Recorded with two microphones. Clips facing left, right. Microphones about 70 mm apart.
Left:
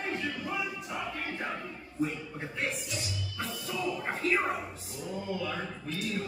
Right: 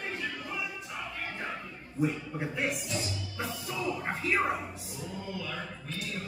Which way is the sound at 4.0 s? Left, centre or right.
Centre.